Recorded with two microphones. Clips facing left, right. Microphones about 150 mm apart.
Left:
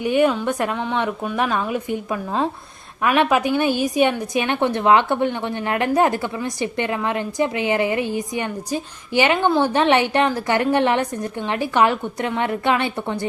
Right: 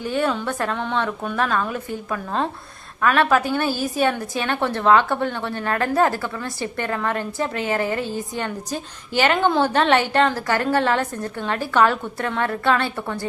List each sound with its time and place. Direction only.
0.0 s a woman's voice: 15° left (ahead or behind)